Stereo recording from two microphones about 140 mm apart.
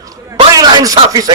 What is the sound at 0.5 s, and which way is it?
Speech, 30° right (ahead or behind).